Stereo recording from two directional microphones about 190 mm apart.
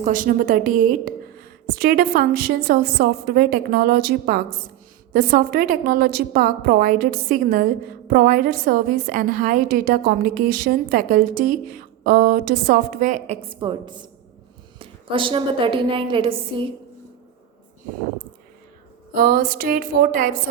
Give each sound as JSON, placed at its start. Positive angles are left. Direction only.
{"t": 0.0, "sound": "a woman's voice", "side_deg": -45}
{"t": 19.1, "sound": "a woman's voice", "side_deg": -50}